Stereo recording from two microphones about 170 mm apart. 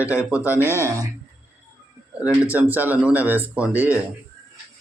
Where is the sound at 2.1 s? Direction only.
10° right (ahead or behind).